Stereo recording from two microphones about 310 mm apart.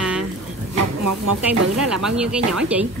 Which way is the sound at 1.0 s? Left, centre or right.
Right.